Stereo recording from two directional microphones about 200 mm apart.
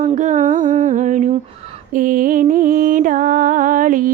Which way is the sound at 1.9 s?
45° right (ahead or behind).